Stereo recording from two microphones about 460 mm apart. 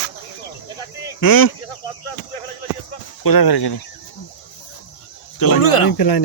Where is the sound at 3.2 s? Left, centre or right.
Left.